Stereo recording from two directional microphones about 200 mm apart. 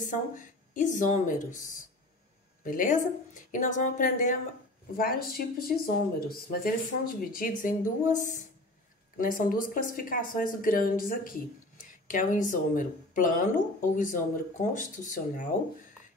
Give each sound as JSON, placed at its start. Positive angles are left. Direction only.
{"t": 0.0, "sound": "a woman's voice", "side_deg": 40}
{"t": 2.6, "sound": "a woman's voice", "side_deg": 45}